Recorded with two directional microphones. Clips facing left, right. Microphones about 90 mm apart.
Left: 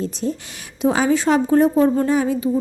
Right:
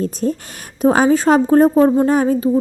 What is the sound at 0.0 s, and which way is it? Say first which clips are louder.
A woman's voice: right 4 dB; 45° right (ahead or behind).